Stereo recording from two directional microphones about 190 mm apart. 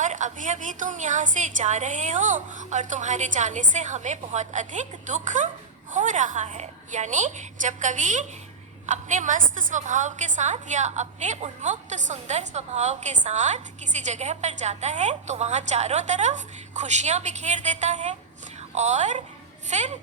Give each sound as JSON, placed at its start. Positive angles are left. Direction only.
{"t": 0.0, "sound": "a woman's voice", "side_deg": -40}